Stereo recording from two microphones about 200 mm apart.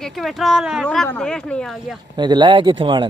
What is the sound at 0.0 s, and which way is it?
Speech, centre (ahead or behind).